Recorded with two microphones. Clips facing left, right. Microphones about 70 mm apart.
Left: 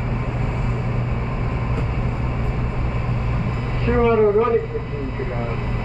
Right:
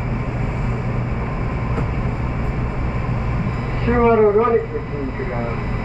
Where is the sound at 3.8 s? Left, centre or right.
Right.